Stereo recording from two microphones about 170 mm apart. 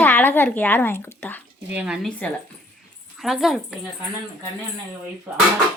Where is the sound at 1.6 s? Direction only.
10° right (ahead or behind).